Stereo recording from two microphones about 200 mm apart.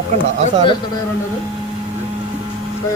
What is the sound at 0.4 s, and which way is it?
Speech, 25° left (ahead or behind).